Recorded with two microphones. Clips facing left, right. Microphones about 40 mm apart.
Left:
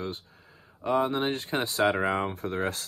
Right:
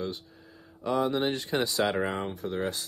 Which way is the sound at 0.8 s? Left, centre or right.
Left.